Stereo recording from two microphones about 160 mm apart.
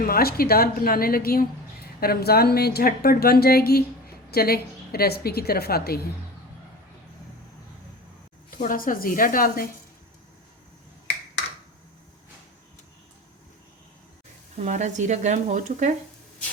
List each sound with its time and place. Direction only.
0.0 s a woman's voice: 70° left (ahead or behind)
8.4 s a woman's voice: 60° left (ahead or behind)
14.5 s speech: 45° right (ahead or behind)